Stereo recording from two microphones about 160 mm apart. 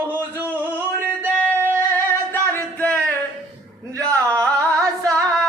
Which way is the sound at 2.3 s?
10° left (ahead or behind).